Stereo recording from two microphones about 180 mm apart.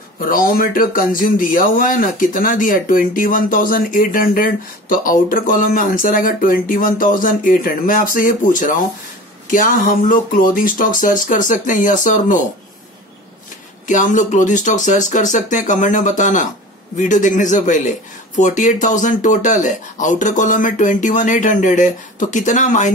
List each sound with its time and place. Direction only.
0.2 s speech: 50° left (ahead or behind)
13.8 s speech: 45° left (ahead or behind)